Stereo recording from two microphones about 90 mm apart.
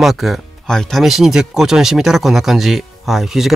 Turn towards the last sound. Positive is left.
turn(degrees=-5)  # may be behind; listen again after turning